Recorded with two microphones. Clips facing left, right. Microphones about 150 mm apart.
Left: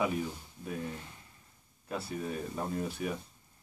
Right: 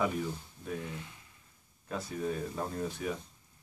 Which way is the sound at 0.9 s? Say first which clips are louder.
Left 1 dB; 40° left (ahead or behind).